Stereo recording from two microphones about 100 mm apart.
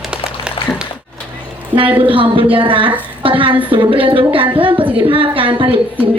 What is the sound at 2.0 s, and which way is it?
A woman's voice, 60° right (ahead or behind).